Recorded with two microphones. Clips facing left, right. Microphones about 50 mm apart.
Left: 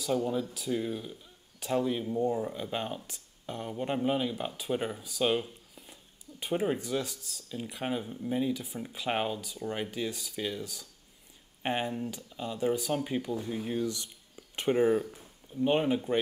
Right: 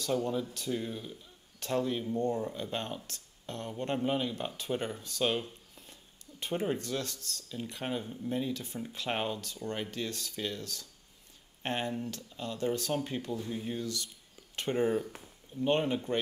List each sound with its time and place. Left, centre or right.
0.0 s speech: centre
13.7 s speech: left